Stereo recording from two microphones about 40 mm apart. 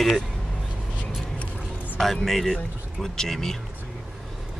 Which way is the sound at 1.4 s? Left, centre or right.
Left.